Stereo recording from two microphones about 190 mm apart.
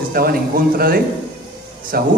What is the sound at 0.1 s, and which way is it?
A man's voice, 50° right (ahead or behind).